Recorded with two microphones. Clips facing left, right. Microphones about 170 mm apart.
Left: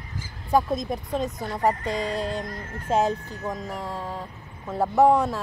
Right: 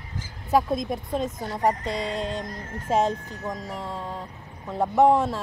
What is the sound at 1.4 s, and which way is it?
Speech, 15° right (ahead or behind).